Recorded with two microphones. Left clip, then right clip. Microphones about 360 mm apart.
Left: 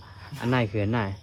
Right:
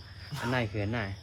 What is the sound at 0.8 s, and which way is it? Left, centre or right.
Speech, centre.